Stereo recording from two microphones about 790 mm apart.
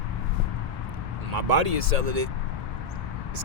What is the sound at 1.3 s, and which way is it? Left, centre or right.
Speech, right.